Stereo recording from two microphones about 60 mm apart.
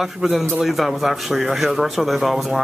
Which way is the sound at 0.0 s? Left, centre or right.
Centre.